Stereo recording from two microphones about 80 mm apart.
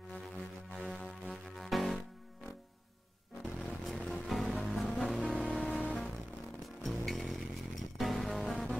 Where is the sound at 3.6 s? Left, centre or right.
Centre.